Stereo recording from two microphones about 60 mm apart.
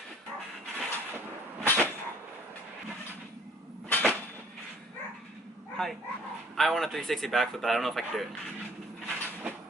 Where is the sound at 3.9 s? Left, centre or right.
Left.